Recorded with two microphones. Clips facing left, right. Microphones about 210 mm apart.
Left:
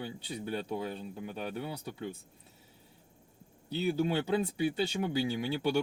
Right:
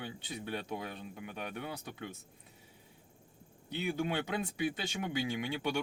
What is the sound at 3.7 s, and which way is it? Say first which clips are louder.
Speech: left 4 dB; 35° left (ahead or behind).